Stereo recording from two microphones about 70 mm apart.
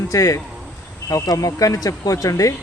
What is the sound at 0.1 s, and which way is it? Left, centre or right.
A man's voice, left.